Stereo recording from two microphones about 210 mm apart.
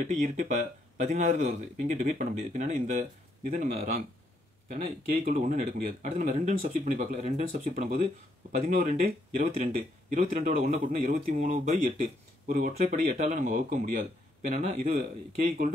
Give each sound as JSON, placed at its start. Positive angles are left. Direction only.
{"t": 0.1, "sound": "speech", "side_deg": -35}
{"t": 5.2, "sound": "speech", "side_deg": -35}
{"t": 8.9, "sound": "speech", "side_deg": -30}